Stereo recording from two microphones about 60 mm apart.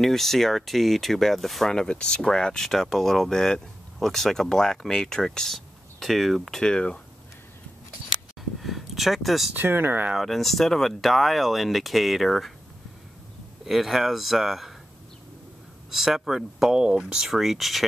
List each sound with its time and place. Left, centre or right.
0.0 s speech: centre
6.6 s speech: centre
8.4 s a sound: centre
9.6 s speech: right
10.1 s speech: centre
13.7 s speech: centre
15.9 s speech: centre
16.7 s speech: centre